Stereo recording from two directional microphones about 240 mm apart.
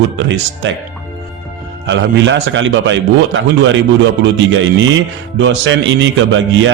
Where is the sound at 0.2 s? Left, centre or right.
Right.